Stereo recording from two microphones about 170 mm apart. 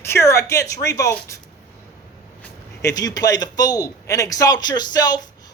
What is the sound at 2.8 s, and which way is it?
A man's voice, 20° left (ahead or behind).